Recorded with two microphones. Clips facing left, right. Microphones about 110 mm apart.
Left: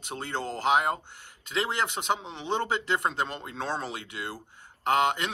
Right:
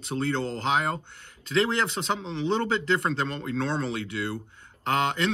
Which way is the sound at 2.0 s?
20° left (ahead or behind).